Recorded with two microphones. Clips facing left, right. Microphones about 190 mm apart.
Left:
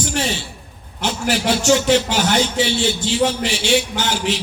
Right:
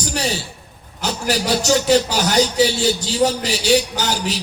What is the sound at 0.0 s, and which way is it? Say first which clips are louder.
A man's voice: left 1 dB; 40° right (ahead or behind).